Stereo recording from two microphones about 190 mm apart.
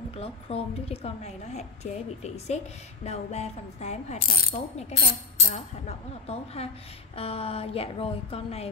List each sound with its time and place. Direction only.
0.1 s a woman's voice: 30° left (ahead or behind)